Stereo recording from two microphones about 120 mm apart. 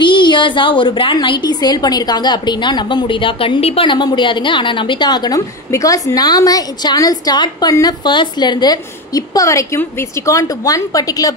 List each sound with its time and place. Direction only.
0.0 s a woman's voice: 40° left (ahead or behind)